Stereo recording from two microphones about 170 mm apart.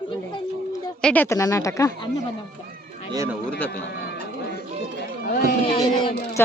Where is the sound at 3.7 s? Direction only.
75° left (ahead or behind).